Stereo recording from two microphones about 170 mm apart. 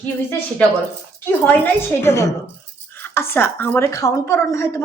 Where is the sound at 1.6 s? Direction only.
15° left (ahead or behind).